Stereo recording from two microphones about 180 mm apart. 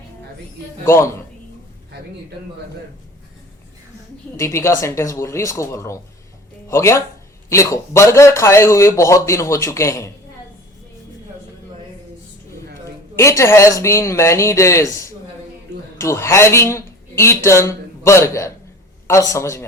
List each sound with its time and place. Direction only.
0.9 s a man's voice: 15° left (ahead or behind)
4.4 s a man's voice: 15° left (ahead or behind)
13.1 s a man's voice: 15° left (ahead or behind)
16.0 s a man's voice: 15° left (ahead or behind)